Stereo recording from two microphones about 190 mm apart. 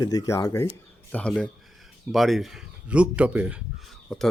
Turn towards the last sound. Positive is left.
turn(degrees=0)  # may be behind; listen again after turning